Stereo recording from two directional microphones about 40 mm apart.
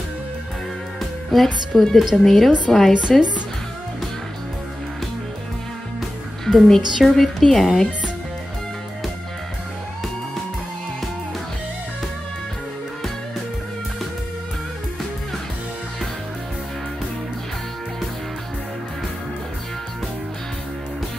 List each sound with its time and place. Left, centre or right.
1.3 s speech: centre
5.9 s music: centre
6.7 s speech: centre